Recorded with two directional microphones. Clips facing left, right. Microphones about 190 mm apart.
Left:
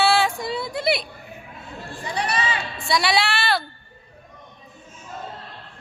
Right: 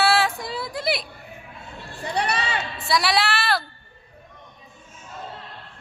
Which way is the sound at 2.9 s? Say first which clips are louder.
Left 1 dB; centre (ahead or behind).